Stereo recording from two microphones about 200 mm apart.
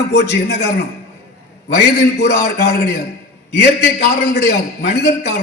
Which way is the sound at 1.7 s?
55° left (ahead or behind).